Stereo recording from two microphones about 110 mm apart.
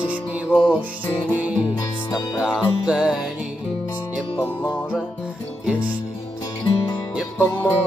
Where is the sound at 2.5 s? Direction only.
5° right (ahead or behind).